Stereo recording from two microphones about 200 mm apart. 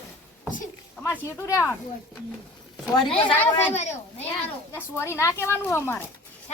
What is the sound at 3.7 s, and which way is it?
Speech, 35° left (ahead or behind).